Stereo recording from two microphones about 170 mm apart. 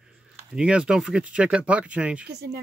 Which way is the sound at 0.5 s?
5° right (ahead or behind).